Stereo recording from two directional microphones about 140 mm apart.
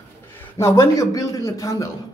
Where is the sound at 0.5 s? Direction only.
20° left (ahead or behind).